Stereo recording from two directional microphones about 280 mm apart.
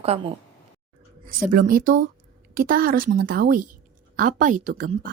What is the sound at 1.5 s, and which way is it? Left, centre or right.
A woman's voice, right.